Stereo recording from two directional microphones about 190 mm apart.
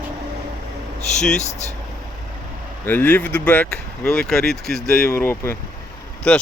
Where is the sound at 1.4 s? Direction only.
35° left (ahead or behind).